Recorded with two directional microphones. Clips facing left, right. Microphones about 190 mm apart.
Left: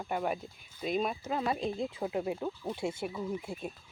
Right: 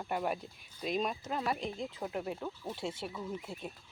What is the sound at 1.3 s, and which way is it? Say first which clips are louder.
Speech: left 6 dB; 15° left (ahead or behind).